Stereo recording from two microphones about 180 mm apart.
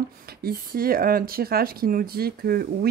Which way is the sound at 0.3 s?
55° right (ahead or behind).